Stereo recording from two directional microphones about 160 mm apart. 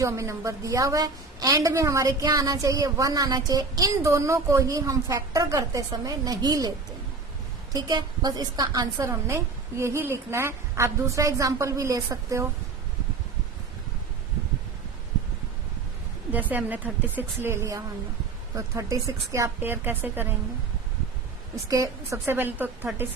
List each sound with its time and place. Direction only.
0.0 s a woman's voice: 20° right (ahead or behind)
16.3 s a woman's voice: 10° right (ahead or behind)
21.5 s a woman's voice: 20° right (ahead or behind)